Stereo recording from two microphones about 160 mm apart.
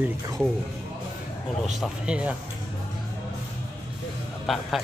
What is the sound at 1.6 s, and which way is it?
Speech, 5° right (ahead or behind).